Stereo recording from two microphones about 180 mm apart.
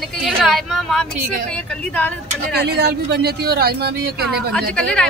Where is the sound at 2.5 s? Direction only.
65° right (ahead or behind).